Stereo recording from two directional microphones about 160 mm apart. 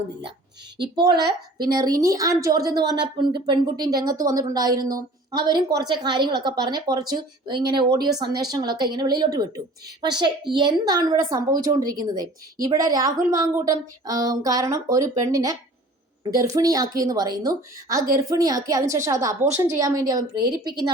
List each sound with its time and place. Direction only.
0.9 s speech: 25° right (ahead or behind)